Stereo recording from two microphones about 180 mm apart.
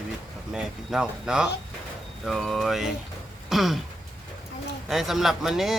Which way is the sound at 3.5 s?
Centre (ahead or behind).